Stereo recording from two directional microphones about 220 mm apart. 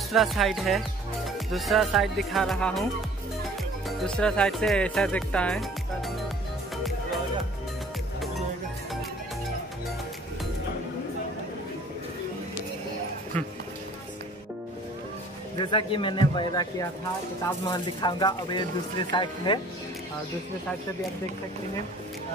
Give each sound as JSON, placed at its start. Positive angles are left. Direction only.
{"t": 0.1, "sound": "speech", "side_deg": 0}
{"t": 4.0, "sound": "speech", "side_deg": 5}
{"t": 15.6, "sound": "speech", "side_deg": 20}
{"t": 17.6, "sound": "speech", "side_deg": 20}